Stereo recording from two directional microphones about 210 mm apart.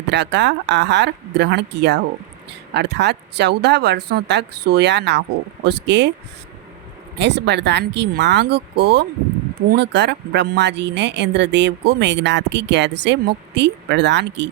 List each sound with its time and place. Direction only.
0.1 s speech: 55° right (ahead or behind)
7.2 s speech: 55° right (ahead or behind)